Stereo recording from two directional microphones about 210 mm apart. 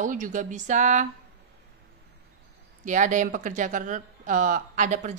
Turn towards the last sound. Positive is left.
turn(degrees=-35)  # may be behind; listen again after turning